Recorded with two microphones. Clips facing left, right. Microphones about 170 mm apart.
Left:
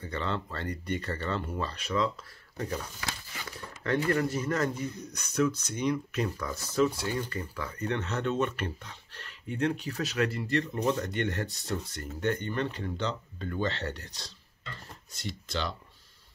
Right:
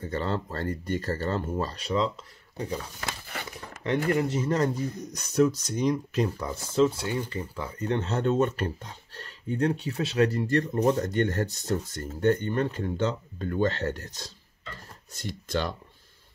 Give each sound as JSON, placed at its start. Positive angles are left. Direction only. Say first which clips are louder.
{"t": 0.0, "sound": "speech", "louder": "right 4 dB", "side_deg": -40}
{"t": 2.5, "sound": "speech", "louder": "right 2 dB", "side_deg": -15}
{"t": 3.3, "sound": "a sound", "louder": "right 4 dB", "side_deg": -60}
{"t": 4.1, "sound": "speech", "louder": "right 3 dB", "side_deg": -25}
{"t": 5.1, "sound": "speech", "louder": "right 5 dB", "side_deg": -40}
{"t": 12.0, "sound": "speech", "louder": "right 7 dB", "side_deg": -30}
{"t": 12.7, "sound": "speech", "louder": "right 5 dB", "side_deg": -45}